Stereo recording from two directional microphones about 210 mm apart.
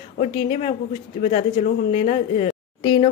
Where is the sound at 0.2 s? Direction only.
30° left (ahead or behind).